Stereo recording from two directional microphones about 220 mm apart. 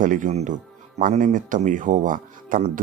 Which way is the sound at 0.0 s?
35° right (ahead or behind).